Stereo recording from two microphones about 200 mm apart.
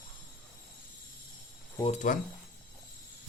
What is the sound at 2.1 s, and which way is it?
Speech, 40° left (ahead or behind).